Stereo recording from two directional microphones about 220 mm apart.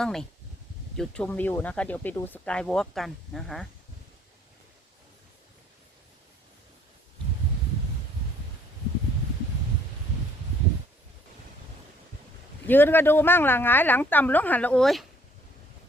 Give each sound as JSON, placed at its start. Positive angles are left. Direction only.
{"t": 0.0, "sound": "speech", "side_deg": 0}
{"t": 12.6, "sound": "speech", "side_deg": 10}